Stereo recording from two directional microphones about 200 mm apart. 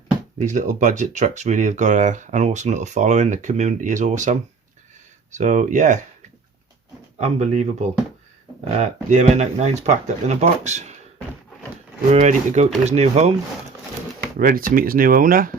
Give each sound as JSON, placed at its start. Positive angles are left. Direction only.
{"t": 0.3, "sound": "speech", "side_deg": -40}
{"t": 7.2, "sound": "speech", "side_deg": -35}
{"t": 12.1, "sound": "speech", "side_deg": -35}
{"t": 14.3, "sound": "speech", "side_deg": -45}